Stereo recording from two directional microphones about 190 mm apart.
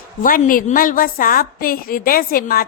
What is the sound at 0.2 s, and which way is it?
A woman's voice, 45° left (ahead or behind).